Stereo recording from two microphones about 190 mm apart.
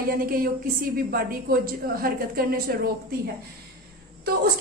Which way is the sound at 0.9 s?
50° right (ahead or behind).